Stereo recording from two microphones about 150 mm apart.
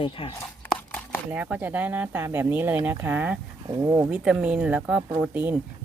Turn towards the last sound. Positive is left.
turn(degrees=-10)  # may be behind; listen again after turning